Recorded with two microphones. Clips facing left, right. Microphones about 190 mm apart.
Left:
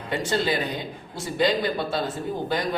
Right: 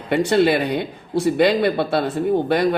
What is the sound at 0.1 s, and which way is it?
Speech, 65° right (ahead or behind).